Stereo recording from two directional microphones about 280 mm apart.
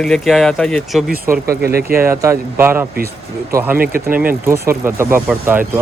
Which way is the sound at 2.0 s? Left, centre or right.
Centre.